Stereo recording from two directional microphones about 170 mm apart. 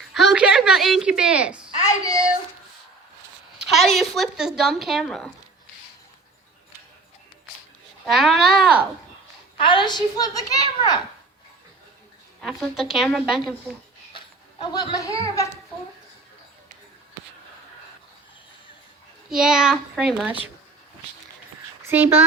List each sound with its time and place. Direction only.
0.1 s a sound: centre (ahead or behind)
1.8 s child singing: 20° left (ahead or behind)
3.6 s a sound: centre (ahead or behind)
3.9 s a woman's voice: centre (ahead or behind)
8.0 s a woman's voice: centre (ahead or behind)
9.6 s a child's voice: 30° left (ahead or behind)
12.4 s a woman's voice: centre (ahead or behind)
14.6 s a child's voice: 25° left (ahead or behind)
19.3 s a woman's voice: 5° right (ahead or behind)
21.8 s speech: 10° right (ahead or behind)